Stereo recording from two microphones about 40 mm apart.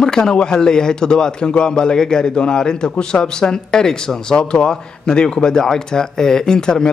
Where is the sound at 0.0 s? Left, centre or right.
Centre.